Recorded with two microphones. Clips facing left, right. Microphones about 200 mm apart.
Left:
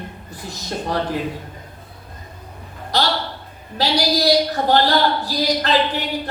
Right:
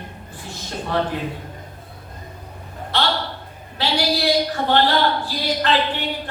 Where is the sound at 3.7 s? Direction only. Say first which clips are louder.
Left 2 dB; 40° left (ahead or behind).